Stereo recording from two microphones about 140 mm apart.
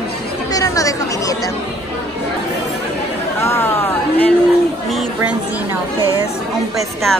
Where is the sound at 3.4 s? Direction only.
15° left (ahead or behind).